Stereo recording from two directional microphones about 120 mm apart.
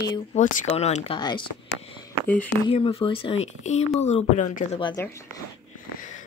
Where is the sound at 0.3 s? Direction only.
90° left; by 1.1 s 65° left (ahead or behind).